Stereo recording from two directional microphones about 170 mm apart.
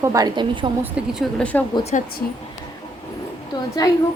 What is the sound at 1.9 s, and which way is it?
Speech, 45° left (ahead or behind).